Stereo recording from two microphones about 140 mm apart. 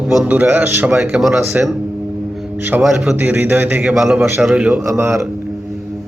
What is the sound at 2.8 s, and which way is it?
Speech, centre (ahead or behind).